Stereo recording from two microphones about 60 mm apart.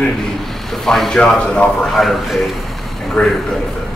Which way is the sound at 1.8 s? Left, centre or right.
Centre.